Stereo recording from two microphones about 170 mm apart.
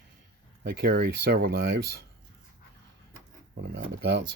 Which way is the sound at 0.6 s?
65° right (ahead or behind).